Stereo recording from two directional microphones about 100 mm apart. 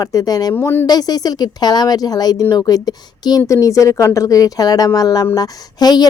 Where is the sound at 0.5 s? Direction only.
20° left (ahead or behind).